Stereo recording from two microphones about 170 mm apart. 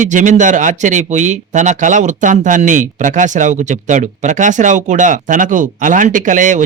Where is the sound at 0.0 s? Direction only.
45° right (ahead or behind).